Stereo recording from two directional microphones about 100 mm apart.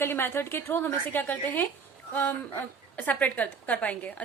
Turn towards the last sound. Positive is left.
turn(degrees=15)  # may be behind; listen again after turning